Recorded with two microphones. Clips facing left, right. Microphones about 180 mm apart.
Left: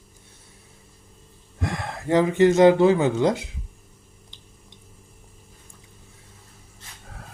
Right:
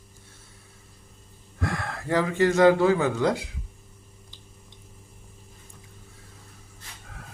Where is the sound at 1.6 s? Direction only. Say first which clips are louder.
Left 1 dB; 20° left (ahead or behind).